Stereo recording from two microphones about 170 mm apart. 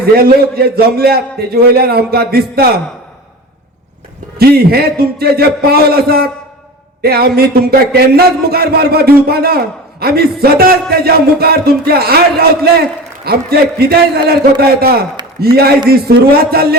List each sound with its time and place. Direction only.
0.0 s a man's voice: 65° right (ahead or behind)
4.4 s a man's voice: 65° right (ahead or behind)